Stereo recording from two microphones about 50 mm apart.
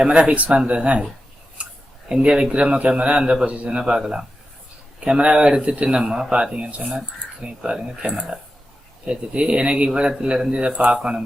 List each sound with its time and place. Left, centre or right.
0.0 s a man's voice: right
2.0 s a man's voice: centre